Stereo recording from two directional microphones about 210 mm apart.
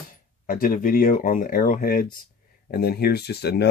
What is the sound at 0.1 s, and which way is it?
Speech, 40° left (ahead or behind).